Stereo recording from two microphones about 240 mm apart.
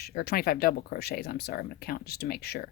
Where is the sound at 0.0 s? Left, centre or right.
Left.